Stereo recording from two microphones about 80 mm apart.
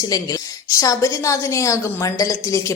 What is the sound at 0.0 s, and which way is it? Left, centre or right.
A woman's voice, left.